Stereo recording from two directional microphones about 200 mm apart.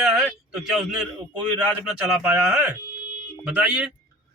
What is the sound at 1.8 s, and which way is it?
Speech, 5° right (ahead or behind).